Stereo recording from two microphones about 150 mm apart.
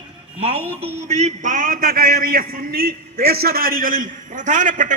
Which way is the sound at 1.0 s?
50° right (ahead or behind).